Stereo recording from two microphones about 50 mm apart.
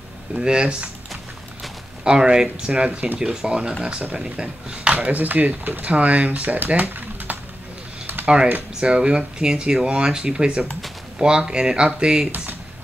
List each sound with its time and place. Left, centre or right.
0.3 s speech: centre
2.0 s speech: centre
4.9 s speech: right
5.9 s speech: right
8.8 s speech: centre